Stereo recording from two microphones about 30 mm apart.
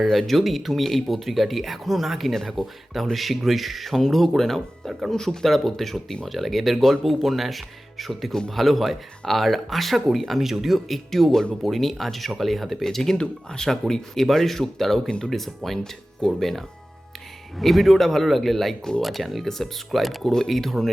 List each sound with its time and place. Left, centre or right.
0.3 s speech: centre
2.3 s speech: centre
2.6 s speech: centre
4.9 s speech: centre
5.1 s speech: centre
8.3 s speech: left
8.5 s speech: centre
13.1 s speech: left
13.7 s speech: centre